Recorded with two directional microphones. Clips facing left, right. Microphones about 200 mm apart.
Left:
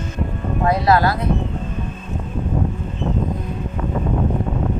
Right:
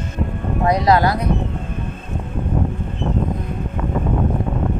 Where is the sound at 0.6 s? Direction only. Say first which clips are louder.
Right 1 dB; 15° right (ahead or behind).